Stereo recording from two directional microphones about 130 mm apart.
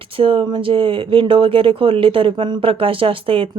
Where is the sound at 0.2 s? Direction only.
40° right (ahead or behind).